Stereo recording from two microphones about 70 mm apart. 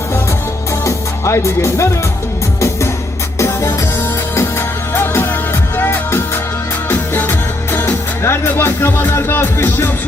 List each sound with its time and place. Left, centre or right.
0.9 s music: left
4.9 s music: left